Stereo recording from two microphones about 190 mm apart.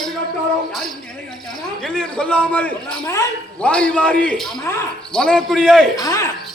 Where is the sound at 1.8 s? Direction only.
5° left (ahead or behind).